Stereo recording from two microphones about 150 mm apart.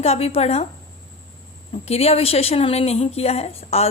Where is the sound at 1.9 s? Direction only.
40° left (ahead or behind).